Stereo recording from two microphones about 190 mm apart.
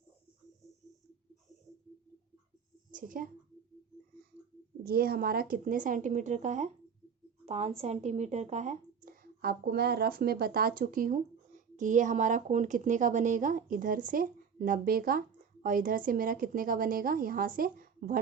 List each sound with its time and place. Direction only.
2.9 s a woman's voice: 45° right (ahead or behind)
4.8 s a woman's voice: 50° right (ahead or behind)